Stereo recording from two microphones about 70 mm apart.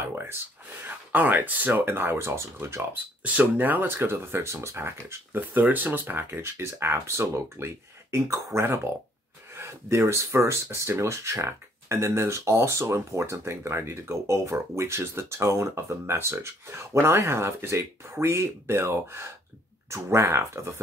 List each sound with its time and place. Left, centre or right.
0.1 s speech: right
3.2 s speech: right
5.4 s speech: right